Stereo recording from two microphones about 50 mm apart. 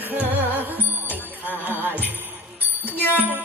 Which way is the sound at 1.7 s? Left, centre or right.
Right.